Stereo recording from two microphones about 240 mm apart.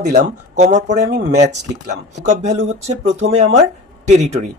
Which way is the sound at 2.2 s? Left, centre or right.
Right.